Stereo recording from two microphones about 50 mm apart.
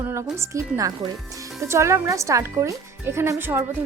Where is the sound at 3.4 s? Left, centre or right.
Right.